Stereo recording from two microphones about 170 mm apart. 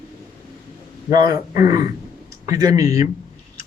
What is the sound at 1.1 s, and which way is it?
Speech, 25° right (ahead or behind).